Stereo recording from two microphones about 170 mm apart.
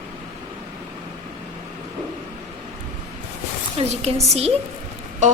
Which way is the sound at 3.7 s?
40° right (ahead or behind).